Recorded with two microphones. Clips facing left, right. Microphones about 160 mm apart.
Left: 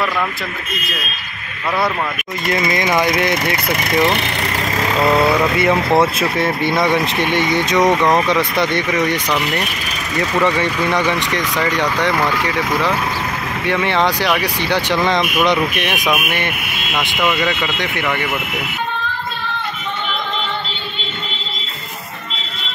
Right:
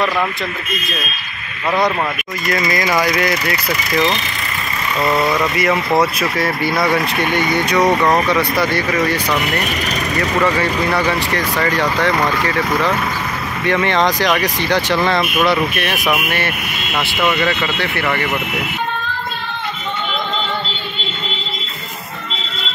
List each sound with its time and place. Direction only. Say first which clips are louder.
2.6 s speech: left 1 dB; 25° left (ahead or behind)
5.6 s speech: even; 25° left (ahead or behind)
7.4 s speech: even; centre (ahead or behind)
8.3 s speech: even; 20° left (ahead or behind)
10.4 s speech: even; 20° left (ahead or behind)
13.7 s speech: right 1 dB; 10° left (ahead or behind)
15.3 s speech: even; 5° right (ahead or behind)
15.7 s speech: even; 15° left (ahead or behind)